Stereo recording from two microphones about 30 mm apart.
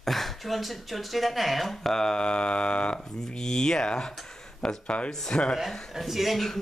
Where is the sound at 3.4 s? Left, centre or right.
Centre.